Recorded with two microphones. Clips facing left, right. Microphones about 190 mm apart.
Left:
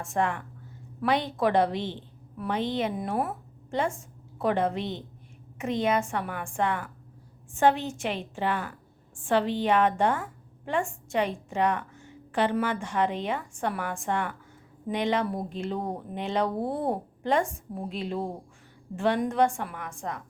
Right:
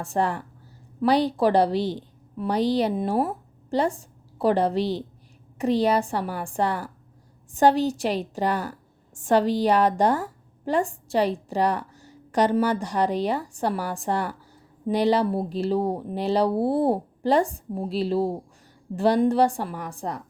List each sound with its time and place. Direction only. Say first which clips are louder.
0.0 s a woman's voice: right 3 dB; 35° right (ahead or behind)